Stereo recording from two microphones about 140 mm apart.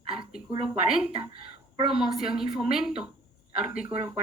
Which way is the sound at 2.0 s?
5° right (ahead or behind).